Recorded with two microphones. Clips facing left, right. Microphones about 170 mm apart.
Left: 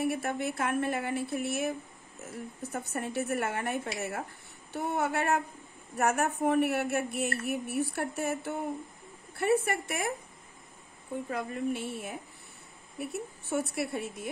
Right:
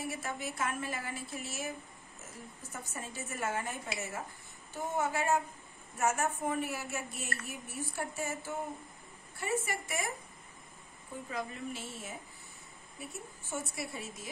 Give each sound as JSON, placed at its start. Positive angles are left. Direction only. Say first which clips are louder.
{"t": 0.0, "sound": "speech", "louder": "left 8 dB", "side_deg": 60}
{"t": 2.7, "sound": "speech", "louder": "left 10 dB", "side_deg": 65}
{"t": 11.2, "sound": "speech", "louder": "left 6 dB", "side_deg": 60}